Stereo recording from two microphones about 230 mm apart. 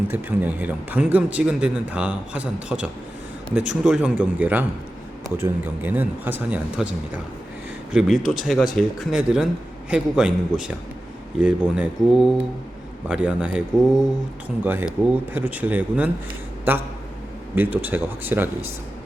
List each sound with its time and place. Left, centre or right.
0.1 s a man's voice: centre
7.9 s a man's voice: centre
17.5 s speech: centre